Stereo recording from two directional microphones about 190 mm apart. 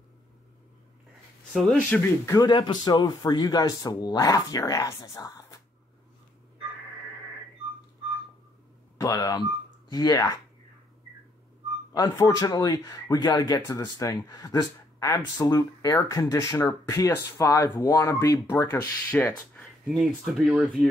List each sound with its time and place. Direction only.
1.5 s speech: centre (ahead or behind)
2.2 s speech: 20° left (ahead or behind)
8.9 s speech: 20° left (ahead or behind)
11.9 s speech: 20° left (ahead or behind)
19.9 s speech: centre (ahead or behind)